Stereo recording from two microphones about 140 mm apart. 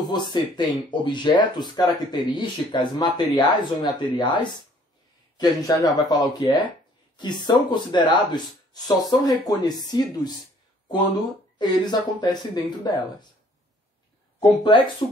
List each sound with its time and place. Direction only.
0.0 s speech: 30° left (ahead or behind)